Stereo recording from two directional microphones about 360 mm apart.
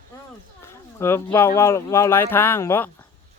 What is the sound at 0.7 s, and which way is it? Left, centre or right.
Speech, centre.